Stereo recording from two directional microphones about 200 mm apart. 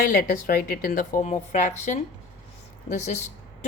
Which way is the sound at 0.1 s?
50° left (ahead or behind).